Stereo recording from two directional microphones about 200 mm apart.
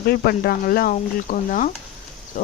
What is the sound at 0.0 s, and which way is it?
Speech, 50° left (ahead or behind).